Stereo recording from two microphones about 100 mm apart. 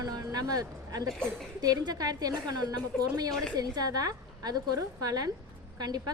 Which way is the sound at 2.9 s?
10° left (ahead or behind).